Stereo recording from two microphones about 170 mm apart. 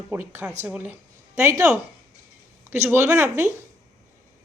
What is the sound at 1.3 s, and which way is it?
Speech, 20° right (ahead or behind).